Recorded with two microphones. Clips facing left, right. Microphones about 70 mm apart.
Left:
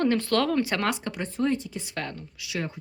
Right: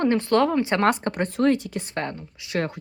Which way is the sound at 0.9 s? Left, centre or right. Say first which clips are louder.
Right 6 dB; right.